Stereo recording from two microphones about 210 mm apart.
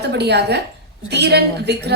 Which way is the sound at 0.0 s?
50° right (ahead or behind).